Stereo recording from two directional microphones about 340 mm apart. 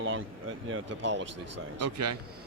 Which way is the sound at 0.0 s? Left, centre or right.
Right.